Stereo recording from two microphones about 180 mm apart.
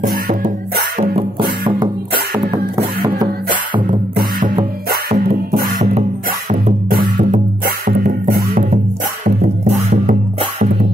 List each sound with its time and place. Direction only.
0.0 s music: 45° right (ahead or behind)
1.6 s music: 25° right (ahead or behind)
4.1 s music: 55° right (ahead or behind)